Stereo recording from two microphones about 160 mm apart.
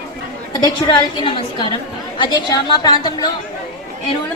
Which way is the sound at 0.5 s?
30° left (ahead or behind).